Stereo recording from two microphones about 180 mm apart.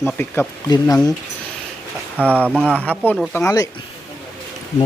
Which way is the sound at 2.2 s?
10° right (ahead or behind).